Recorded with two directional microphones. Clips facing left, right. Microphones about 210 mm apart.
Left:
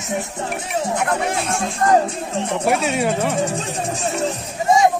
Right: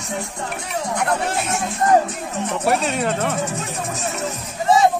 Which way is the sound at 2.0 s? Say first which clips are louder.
Left 2 dB; 30° left (ahead or behind).